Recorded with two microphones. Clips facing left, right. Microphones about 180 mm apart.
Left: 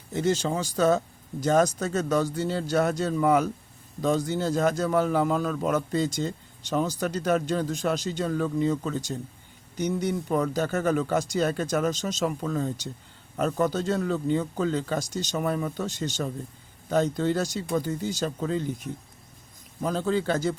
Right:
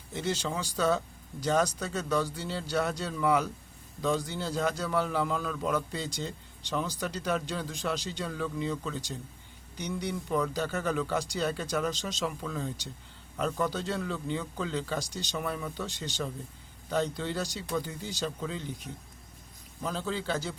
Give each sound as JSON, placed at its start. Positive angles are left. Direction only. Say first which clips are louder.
{"t": 0.1, "sound": "a man's voice", "louder": "left 7 dB", "side_deg": 45}
{"t": 19.8, "sound": "a man's voice", "louder": "left 8 dB", "side_deg": 50}